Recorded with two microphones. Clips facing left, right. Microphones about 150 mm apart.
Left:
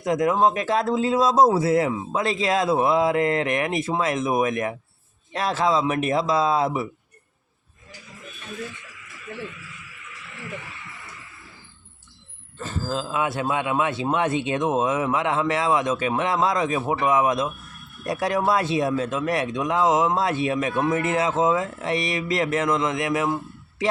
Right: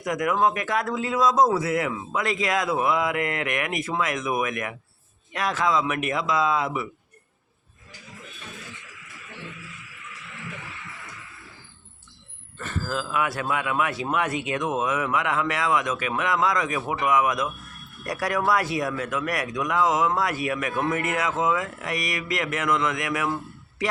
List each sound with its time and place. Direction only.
0.0 s speech: 25° left (ahead or behind)
12.5 s speech: 25° left (ahead or behind)